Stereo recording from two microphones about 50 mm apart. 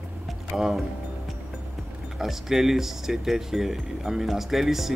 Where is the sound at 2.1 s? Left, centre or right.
Centre.